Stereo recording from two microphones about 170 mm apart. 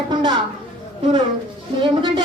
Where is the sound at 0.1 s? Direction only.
25° right (ahead or behind).